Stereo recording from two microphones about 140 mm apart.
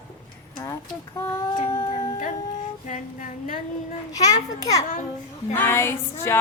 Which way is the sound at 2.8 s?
65° left (ahead or behind).